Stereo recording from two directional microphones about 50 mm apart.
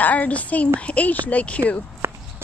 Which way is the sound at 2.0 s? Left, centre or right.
Right.